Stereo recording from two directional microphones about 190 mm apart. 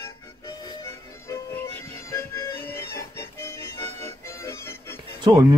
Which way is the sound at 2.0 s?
15° left (ahead or behind).